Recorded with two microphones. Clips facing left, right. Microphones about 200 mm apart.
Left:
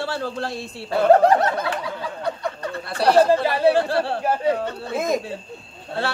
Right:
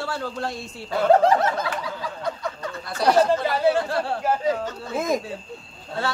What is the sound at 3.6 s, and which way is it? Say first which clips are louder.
Speech: left 4 dB; 30° left (ahead or behind).